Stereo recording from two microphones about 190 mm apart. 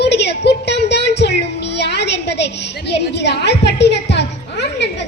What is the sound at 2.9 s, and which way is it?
Music, 60° left (ahead or behind).